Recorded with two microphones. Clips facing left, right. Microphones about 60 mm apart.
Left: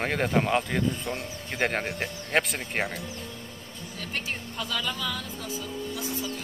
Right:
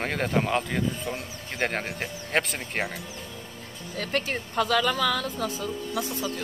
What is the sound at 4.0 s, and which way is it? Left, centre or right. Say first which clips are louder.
A woman's voice: right 6 dB; right.